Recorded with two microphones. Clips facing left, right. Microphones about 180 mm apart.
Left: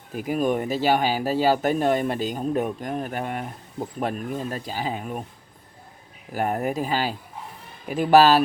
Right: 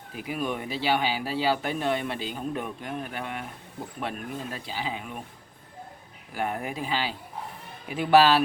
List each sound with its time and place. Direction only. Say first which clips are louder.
0.1 s speech: left 7 dB; 45° left (ahead or behind)
6.3 s speech: left 6 dB; 45° left (ahead or behind)